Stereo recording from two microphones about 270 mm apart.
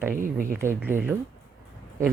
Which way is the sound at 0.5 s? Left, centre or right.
Centre.